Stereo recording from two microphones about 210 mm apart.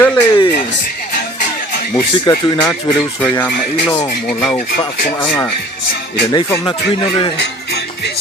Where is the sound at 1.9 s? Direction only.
15° left (ahead or behind).